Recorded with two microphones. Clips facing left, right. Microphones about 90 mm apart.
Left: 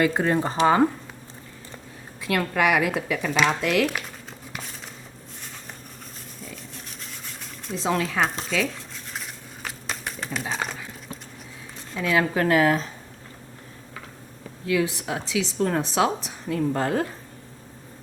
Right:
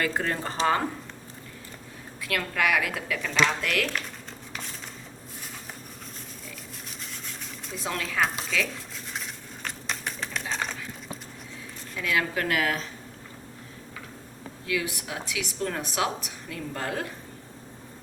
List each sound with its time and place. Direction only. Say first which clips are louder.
0.0 s speech: left 7 dB; 20° left (ahead or behind)
2.2 s speech: left 5 dB; 20° left (ahead or behind)
7.0 s a sound: right 2 dB; centre (ahead or behind)
7.8 s speech: left 7 dB; 25° left (ahead or behind)
8.2 s speech: left 2 dB; centre (ahead or behind)
9.1 s a sound: left 1 dB; centre (ahead or behind)
11.9 s speech: left 5 dB; 30° left (ahead or behind)
14.7 s speech: left 6 dB; 30° left (ahead or behind)